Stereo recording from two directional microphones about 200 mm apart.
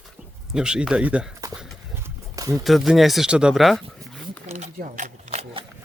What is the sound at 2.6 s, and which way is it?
Speech, centre (ahead or behind).